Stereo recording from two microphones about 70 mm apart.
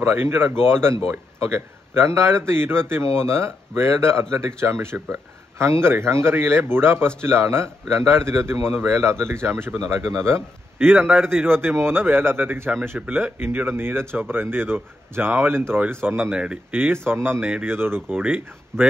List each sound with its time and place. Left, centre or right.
0.0 s speech: right
11.1 s a man's voice: centre
11.4 s speech: right